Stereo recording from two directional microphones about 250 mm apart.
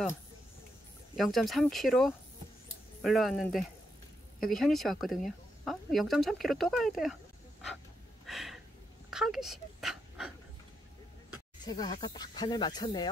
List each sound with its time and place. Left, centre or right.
1.1 s speech: centre
8.3 s a sound: centre
9.1 s dog: centre
11.6 s speech: centre